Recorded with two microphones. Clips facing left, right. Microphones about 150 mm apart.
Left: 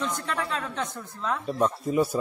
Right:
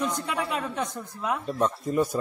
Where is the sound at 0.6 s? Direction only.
10° right (ahead or behind).